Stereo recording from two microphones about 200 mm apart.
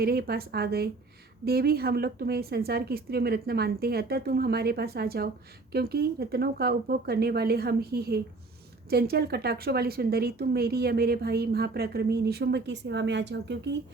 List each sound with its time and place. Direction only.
0.0 s speech: 50° right (ahead or behind)